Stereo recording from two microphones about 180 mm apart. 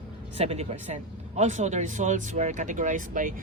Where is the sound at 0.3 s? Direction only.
35° right (ahead or behind).